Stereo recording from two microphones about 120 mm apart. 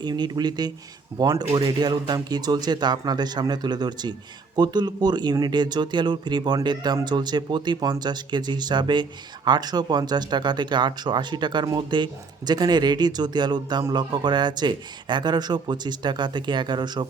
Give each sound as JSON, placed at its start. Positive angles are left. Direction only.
{"t": 0.0, "sound": "speech", "side_deg": -35}